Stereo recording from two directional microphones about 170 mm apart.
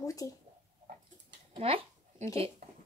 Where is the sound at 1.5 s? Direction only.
35° right (ahead or behind).